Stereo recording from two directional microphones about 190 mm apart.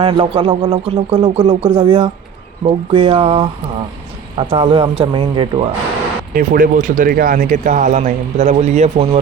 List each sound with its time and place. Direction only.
0.0 s speech: 25° right (ahead or behind)
6.3 s speech: 45° right (ahead or behind)